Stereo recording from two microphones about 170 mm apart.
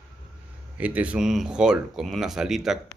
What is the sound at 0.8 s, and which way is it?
Speech, 10° right (ahead or behind).